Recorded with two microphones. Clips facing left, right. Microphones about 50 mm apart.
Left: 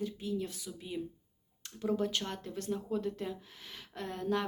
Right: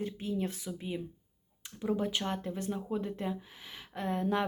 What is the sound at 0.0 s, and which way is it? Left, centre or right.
Speech, right.